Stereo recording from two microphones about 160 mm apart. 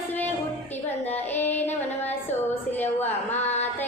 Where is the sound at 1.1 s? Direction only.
10° left (ahead or behind).